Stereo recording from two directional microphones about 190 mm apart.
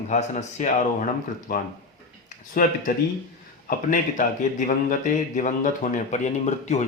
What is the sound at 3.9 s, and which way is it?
A man's voice, 45° left (ahead or behind).